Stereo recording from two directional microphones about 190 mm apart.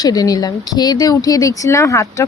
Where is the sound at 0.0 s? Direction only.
20° left (ahead or behind).